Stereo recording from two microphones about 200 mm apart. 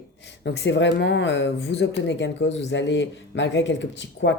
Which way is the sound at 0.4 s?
60° left (ahead or behind).